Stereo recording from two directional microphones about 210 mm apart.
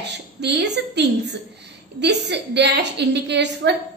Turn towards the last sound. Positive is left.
turn(degrees=-55)  # may be behind; listen again after turning